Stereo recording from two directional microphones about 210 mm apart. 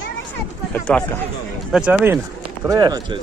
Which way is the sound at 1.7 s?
10° right (ahead or behind).